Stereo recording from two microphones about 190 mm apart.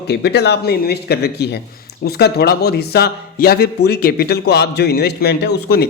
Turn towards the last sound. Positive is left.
turn(degrees=55)  # may be behind; listen again after turning